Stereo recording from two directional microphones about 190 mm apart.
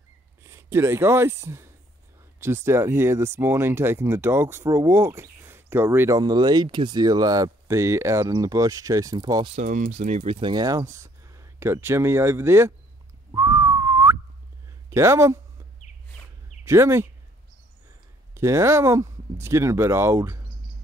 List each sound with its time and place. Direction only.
0.4 s speech: 15° right (ahead or behind)
9.6 s speech: 40° right (ahead or behind); by 12.7 s 15° right (ahead or behind)
13.3 s whistling: 15° right (ahead or behind)
14.9 s speech: 15° right (ahead or behind)
16.6 s speech: 15° right (ahead or behind)
18.3 s speech: 15° right (ahead or behind)